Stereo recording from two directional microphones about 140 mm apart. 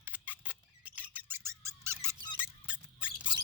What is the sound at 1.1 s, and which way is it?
Squeak, 20° right (ahead or behind).